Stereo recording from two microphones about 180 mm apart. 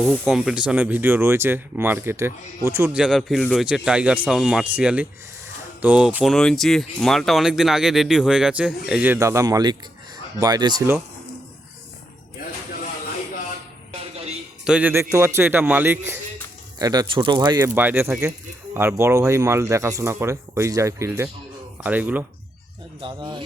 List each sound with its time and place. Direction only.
0.0 s speech: centre (ahead or behind)
2.9 s speech: centre (ahead or behind)
9.1 s speech: 15° right (ahead or behind)
13.9 s music: 35° right (ahead or behind)
14.6 s a man's voice: 5° right (ahead or behind)
16.7 s speech: 20° right (ahead or behind)
17.7 s speech: 10° right (ahead or behind)
23.0 s speech: 25° right (ahead or behind)